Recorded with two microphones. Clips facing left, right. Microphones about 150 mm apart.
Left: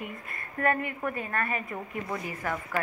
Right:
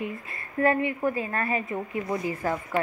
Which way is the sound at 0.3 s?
30° right (ahead or behind).